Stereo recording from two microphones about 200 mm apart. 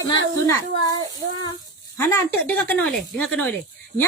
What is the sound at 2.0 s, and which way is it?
Speech, 10° left (ahead or behind).